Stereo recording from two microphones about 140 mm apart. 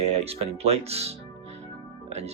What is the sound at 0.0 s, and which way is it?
Speech, 50° right (ahead or behind).